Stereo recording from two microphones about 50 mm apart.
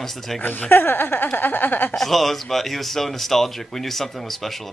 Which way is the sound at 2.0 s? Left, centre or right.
Centre.